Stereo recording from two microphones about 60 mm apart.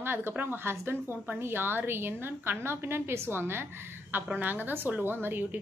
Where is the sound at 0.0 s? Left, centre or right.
Right.